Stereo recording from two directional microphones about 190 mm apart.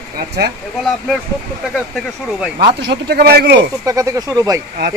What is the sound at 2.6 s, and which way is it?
A man's voice, 60° right (ahead or behind).